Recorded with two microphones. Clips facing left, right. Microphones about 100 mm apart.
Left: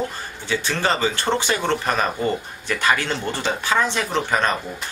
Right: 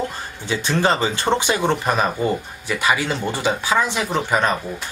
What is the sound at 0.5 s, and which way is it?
Speech, 20° right (ahead or behind).